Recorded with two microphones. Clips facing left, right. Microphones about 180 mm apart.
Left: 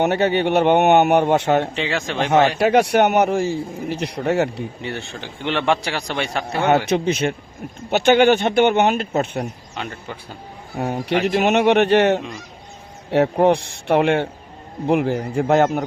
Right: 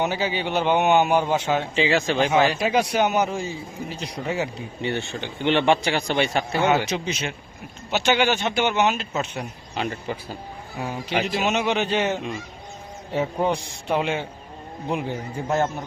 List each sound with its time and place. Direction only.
0.0 s speech: 65° left (ahead or behind)
1.7 s a man's voice: centre (ahead or behind)
2.6 s a man's voice: 65° left (ahead or behind)
4.8 s a man's voice: centre (ahead or behind)
6.7 s speech: 60° left (ahead or behind)
9.7 s a man's voice: 5° right (ahead or behind)
10.8 s a man's voice: 60° left (ahead or behind)